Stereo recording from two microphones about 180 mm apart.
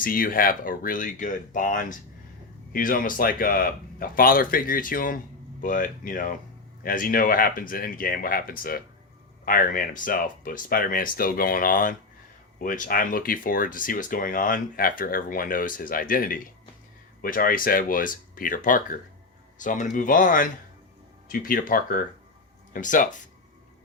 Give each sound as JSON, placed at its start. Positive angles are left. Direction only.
{"t": 0.0, "sound": "speech", "side_deg": 50}